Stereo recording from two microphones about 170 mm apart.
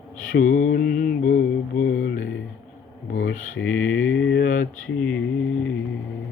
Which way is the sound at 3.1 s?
90° left.